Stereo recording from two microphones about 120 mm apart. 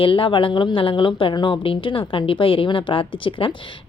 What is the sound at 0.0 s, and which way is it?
A woman's voice, 45° left (ahead or behind).